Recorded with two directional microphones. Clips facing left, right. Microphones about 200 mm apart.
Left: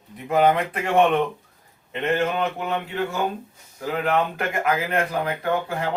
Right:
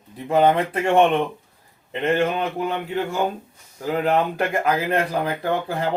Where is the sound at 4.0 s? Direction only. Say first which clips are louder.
Right 2 dB; 35° right (ahead or behind).